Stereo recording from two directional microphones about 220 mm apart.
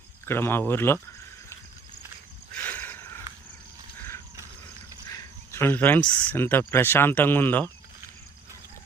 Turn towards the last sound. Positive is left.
turn(degrees=10)  # may be behind; listen again after turning